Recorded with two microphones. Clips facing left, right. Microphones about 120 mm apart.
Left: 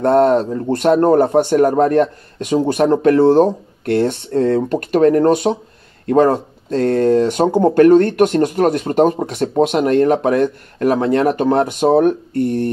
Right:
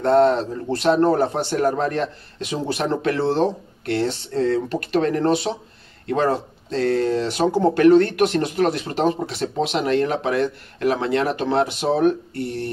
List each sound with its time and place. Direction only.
0.0 s speech: 50° left (ahead or behind)